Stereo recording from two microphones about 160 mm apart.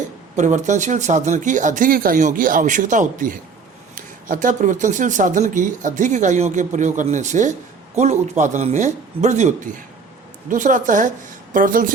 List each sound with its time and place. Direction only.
0.3 s a woman's voice: 50° right (ahead or behind)